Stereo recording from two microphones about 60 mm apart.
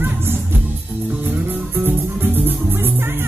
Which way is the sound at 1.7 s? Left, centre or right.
Right.